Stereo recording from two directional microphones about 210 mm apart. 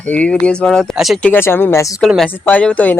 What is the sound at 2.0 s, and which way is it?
Speech, centre (ahead or behind).